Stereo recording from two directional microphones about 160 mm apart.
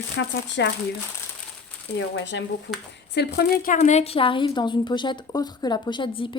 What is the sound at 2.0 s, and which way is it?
A woman's voice, 90° left.